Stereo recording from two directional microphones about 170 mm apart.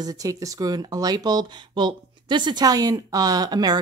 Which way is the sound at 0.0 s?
20° right (ahead or behind).